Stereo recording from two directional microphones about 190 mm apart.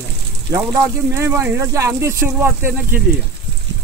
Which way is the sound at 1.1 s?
15° right (ahead or behind).